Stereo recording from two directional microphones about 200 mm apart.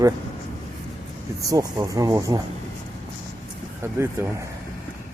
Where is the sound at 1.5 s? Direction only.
20° right (ahead or behind).